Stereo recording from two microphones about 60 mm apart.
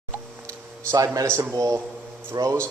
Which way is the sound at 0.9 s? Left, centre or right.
Right.